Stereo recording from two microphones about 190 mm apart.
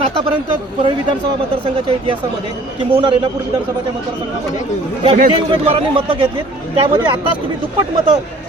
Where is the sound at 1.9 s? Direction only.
30° right (ahead or behind).